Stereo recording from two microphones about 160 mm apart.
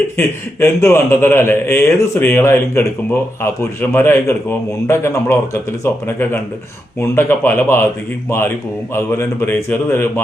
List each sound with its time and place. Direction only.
0.2 s a man's voice: 15° left (ahead or behind)
9.0 s a man's voice: 15° left (ahead or behind)